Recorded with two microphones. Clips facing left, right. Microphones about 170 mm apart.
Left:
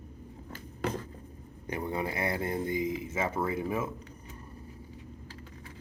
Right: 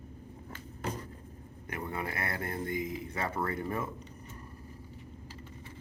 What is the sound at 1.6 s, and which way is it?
Speech, 20° left (ahead or behind).